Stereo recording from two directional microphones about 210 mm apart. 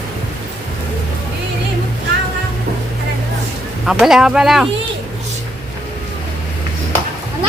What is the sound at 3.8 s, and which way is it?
Speech, centre (ahead or behind).